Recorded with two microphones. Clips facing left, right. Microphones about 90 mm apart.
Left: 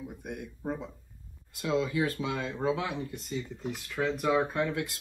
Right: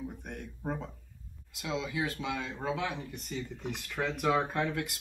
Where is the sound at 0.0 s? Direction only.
10° left (ahead or behind).